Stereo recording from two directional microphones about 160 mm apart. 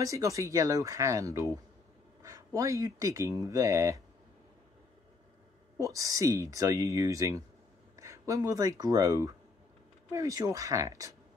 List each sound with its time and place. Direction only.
0.0 s speech: 20° right (ahead or behind)
5.8 s speech: 20° right (ahead or behind)